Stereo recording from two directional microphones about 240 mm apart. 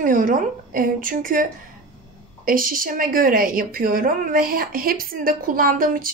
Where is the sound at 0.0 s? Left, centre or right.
Right.